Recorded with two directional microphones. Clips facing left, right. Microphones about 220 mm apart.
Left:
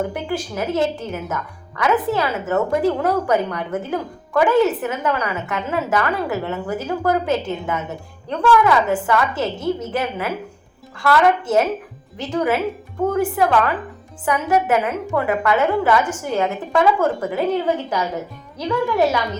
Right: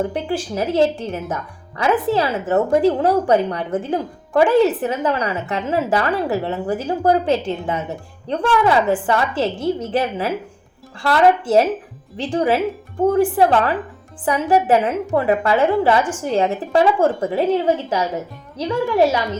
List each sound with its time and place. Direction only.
0.1 s a woman's voice: 30° right (ahead or behind)